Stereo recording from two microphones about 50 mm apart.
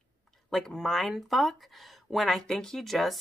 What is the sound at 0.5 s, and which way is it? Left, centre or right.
Speech, centre.